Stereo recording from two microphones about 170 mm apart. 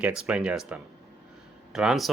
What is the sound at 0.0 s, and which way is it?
Speech, 5° right (ahead or behind).